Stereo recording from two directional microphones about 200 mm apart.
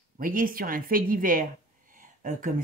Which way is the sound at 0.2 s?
45° right (ahead or behind).